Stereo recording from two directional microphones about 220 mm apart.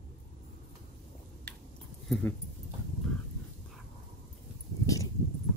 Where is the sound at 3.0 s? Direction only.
5° left (ahead or behind).